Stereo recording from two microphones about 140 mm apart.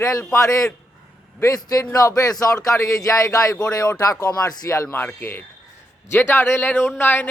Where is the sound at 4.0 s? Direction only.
25° left (ahead or behind).